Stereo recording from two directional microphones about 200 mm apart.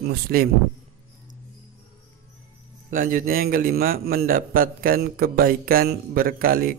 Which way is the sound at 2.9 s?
45° right (ahead or behind).